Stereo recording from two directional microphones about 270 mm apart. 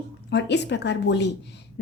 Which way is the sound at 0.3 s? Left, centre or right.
Left.